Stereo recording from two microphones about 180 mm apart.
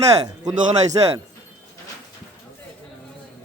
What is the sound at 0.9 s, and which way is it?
Speech, 30° right (ahead or behind).